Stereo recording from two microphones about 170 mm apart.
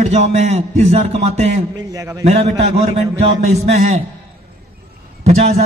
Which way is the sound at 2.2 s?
40° right (ahead or behind).